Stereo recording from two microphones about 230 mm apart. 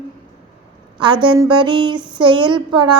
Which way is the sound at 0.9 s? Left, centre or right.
Right.